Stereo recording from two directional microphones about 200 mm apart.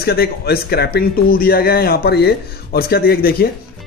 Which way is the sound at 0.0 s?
50° left (ahead or behind).